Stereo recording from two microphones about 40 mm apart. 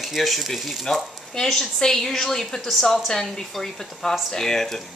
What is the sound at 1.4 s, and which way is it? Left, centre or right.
A woman's voice, centre.